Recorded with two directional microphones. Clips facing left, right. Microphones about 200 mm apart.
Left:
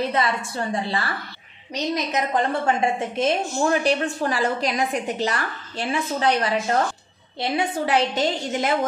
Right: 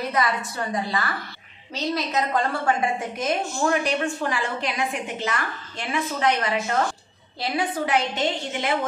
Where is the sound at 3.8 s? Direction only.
35° left (ahead or behind).